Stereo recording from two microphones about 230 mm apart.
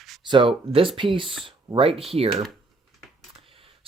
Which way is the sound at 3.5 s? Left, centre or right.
Right.